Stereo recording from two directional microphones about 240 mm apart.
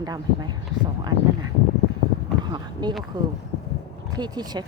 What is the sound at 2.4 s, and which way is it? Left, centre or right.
Speech, centre.